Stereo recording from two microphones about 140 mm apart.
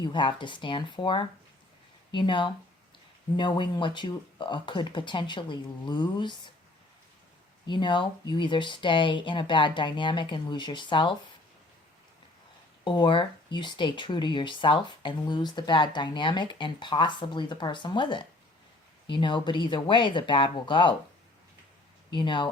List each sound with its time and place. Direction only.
0.0 s speech: 35° left (ahead or behind)
7.7 s speech: 35° left (ahead or behind)
12.8 s speech: 35° left (ahead or behind)
22.1 s speech: 35° left (ahead or behind)